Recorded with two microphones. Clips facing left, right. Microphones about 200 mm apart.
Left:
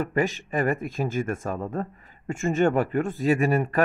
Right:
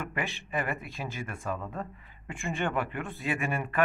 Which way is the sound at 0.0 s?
40° left (ahead or behind).